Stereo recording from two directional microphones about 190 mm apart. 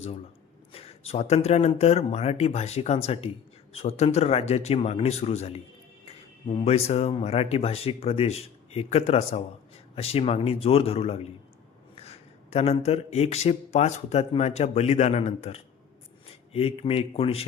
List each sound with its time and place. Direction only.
0.7 s speech: 30° left (ahead or behind)